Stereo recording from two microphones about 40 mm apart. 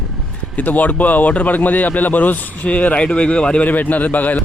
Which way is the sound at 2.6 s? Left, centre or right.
Left.